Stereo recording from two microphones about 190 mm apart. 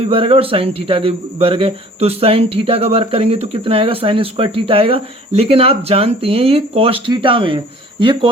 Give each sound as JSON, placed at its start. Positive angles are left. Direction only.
{"t": 0.1, "sound": "a man's voice", "side_deg": -30}